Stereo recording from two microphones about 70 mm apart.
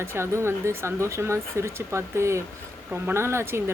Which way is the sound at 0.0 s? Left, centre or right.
Right.